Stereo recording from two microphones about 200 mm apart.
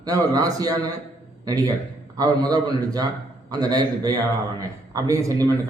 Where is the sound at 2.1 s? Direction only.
20° right (ahead or behind).